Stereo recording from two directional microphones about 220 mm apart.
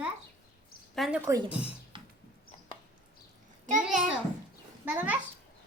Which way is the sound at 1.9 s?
20° right (ahead or behind).